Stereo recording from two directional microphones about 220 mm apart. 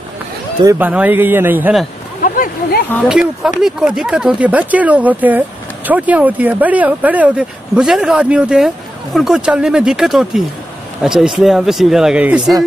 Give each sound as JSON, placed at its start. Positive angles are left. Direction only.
{"t": 0.7, "sound": "speech", "side_deg": -10}
{"t": 2.2, "sound": "a sound", "side_deg": 40}
{"t": 3.1, "sound": "speech", "side_deg": 0}